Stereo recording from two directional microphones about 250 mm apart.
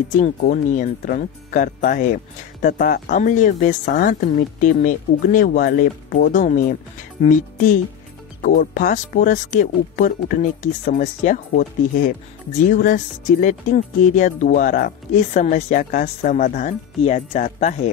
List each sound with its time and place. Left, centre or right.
0.2 s speech: left
12.7 s speech: left